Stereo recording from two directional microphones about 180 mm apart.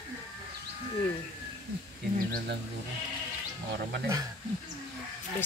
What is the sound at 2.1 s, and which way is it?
Speech, 55° right (ahead or behind).